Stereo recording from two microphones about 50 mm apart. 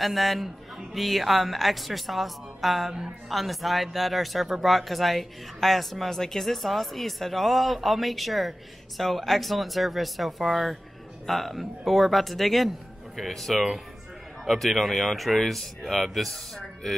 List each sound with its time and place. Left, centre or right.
0.0 s speech: centre